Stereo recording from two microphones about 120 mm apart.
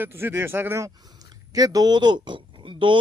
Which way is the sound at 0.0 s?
20° right (ahead or behind).